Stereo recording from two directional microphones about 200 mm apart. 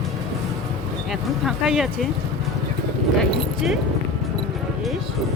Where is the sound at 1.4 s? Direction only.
Centre (ahead or behind).